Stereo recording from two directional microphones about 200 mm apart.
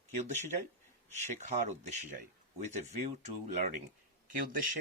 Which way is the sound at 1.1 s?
35° right (ahead or behind).